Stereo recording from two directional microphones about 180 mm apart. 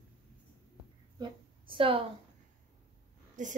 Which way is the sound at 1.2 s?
30° right (ahead or behind).